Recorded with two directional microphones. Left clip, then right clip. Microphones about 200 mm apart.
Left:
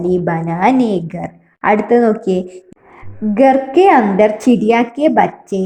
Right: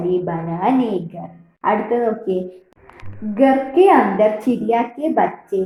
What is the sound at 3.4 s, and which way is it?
A woman's voice, 55° left (ahead or behind).